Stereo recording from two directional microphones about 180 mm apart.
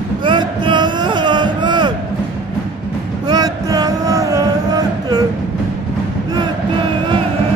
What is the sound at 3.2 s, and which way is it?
Music, 20° right (ahead or behind).